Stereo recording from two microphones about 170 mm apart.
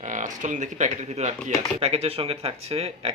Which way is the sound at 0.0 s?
45° right (ahead or behind).